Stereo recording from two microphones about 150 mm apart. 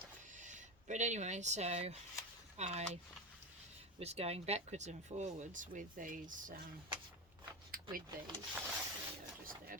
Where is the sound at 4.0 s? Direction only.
45° right (ahead or behind); by 6.6 s 65° right (ahead or behind).